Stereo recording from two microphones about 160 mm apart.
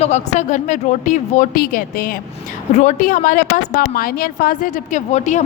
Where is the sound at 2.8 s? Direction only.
50° left (ahead or behind).